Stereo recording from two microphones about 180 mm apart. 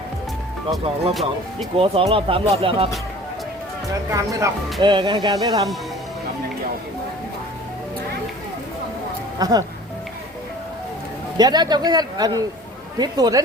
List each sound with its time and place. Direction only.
1.7 s speech: 30° right (ahead or behind)
3.9 s speech: 20° right (ahead or behind)
9.4 s speech: 20° right (ahead or behind)
11.3 s speech: 20° right (ahead or behind)